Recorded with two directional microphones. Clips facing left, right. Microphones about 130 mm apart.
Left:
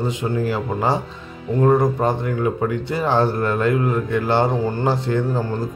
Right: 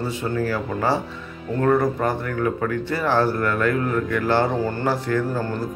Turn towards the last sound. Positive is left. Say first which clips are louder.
# left 2 dB
turn(degrees=25)  # may be behind; listen again after turning